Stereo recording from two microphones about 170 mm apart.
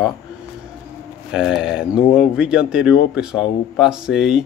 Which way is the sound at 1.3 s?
5° right (ahead or behind).